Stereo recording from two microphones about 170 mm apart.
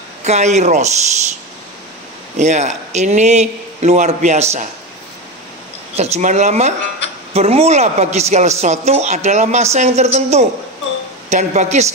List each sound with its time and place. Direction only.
0.2 s a woman's voice: 40° right (ahead or behind)
2.3 s a woman's voice: 45° right (ahead or behind)
5.9 s a woman's voice: 40° right (ahead or behind)